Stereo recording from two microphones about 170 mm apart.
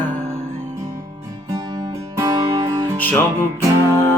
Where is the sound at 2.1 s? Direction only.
20° right (ahead or behind).